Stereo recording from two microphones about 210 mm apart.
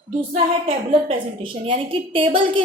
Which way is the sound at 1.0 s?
25° right (ahead or behind).